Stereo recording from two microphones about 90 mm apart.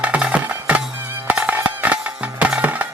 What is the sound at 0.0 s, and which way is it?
Music, 15° right (ahead or behind).